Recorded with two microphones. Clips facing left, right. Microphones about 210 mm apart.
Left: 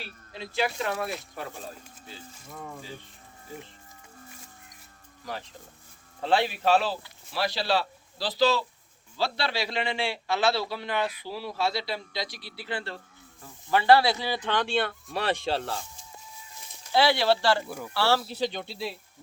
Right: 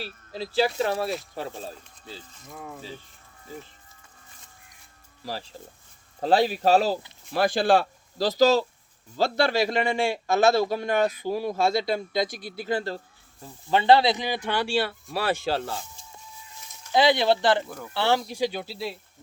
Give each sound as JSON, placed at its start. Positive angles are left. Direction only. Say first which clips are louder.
{"t": 0.0, "sound": "speech", "louder": "right 6 dB", "side_deg": -35}
{"t": 5.2, "sound": "a man's voice", "louder": "right 3 dB", "side_deg": -30}
{"t": 13.4, "sound": "speech", "louder": "right 2 dB", "side_deg": -25}
{"t": 16.9, "sound": "speech", "louder": "right 2 dB", "side_deg": -20}